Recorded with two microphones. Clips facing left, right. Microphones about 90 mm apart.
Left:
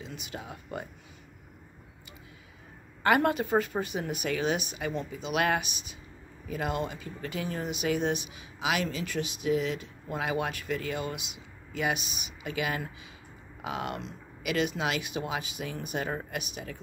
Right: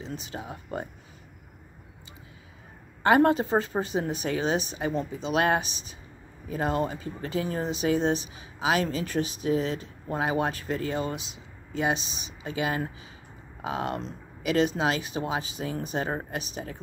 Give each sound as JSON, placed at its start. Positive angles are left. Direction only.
{"t": 0.0, "sound": "speech", "side_deg": -30}
{"t": 3.0, "sound": "speech", "side_deg": -25}